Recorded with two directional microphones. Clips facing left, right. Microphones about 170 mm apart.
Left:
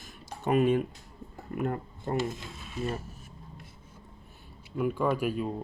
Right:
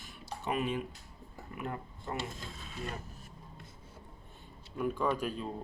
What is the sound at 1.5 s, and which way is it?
Speech, 45° left (ahead or behind).